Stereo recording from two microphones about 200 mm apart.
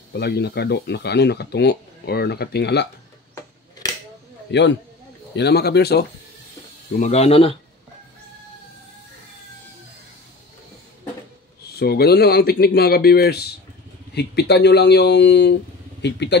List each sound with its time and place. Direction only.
0.1 s speech: 55° left (ahead or behind)
4.5 s a man's voice: 60° left (ahead or behind)
7.0 s speech: 30° left (ahead or behind)
11.7 s speech: 50° left (ahead or behind)